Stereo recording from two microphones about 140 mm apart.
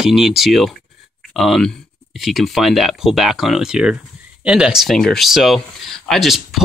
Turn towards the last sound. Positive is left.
turn(degrees=0)  # may be behind; listen again after turning